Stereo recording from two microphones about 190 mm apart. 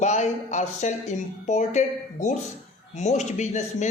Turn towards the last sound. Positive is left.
turn(degrees=40)  # may be behind; listen again after turning